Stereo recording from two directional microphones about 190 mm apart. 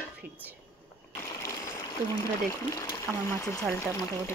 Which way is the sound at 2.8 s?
15° left (ahead or behind).